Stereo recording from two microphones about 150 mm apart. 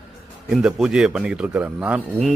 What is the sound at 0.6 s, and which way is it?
Speech, 5° right (ahead or behind).